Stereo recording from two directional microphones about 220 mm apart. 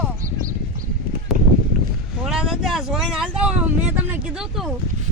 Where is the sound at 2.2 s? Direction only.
5° right (ahead or behind).